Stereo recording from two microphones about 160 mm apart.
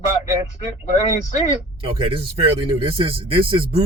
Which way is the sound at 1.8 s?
35° right (ahead or behind).